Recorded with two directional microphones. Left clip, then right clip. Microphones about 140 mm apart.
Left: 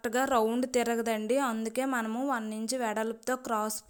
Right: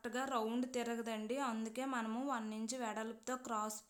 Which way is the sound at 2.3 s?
35° left (ahead or behind).